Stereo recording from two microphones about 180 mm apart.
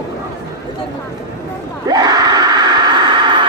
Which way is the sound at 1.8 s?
20° right (ahead or behind).